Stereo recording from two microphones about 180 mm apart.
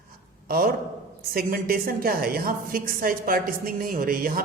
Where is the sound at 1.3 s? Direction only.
55° right (ahead or behind).